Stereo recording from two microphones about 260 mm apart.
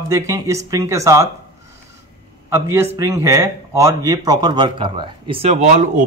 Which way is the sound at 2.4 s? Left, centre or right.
Centre.